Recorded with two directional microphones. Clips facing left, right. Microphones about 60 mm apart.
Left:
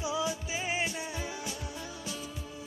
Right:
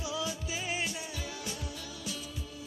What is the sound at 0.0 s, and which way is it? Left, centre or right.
Music, left.